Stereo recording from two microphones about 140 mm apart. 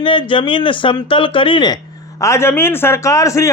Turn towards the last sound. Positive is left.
turn(degrees=20)  # may be behind; listen again after turning